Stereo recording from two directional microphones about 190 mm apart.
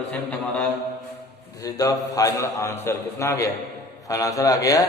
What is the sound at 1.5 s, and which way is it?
A man's voice, 20° left (ahead or behind).